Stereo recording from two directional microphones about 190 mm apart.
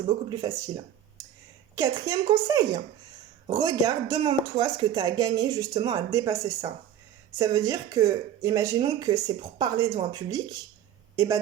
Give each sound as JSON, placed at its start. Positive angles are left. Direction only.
{"t": 0.4, "sound": "a woman's voice", "side_deg": -20}